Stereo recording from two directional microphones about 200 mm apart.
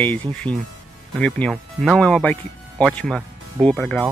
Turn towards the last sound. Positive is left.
turn(degrees=5)  # may be behind; listen again after turning